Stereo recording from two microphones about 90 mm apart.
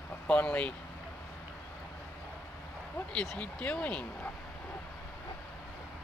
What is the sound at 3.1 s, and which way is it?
Speech, 10° left (ahead or behind).